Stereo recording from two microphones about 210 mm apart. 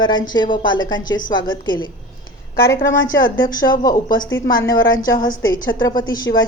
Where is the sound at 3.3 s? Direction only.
20° left (ahead or behind).